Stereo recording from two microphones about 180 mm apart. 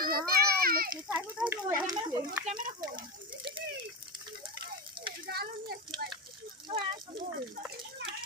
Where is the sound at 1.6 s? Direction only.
20° right (ahead or behind).